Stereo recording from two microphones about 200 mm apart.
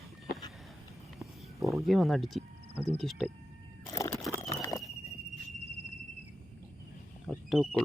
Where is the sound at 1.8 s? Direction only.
Centre (ahead or behind).